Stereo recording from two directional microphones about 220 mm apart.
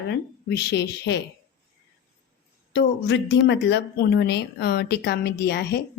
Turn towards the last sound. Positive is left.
turn(degrees=50)  # may be behind; listen again after turning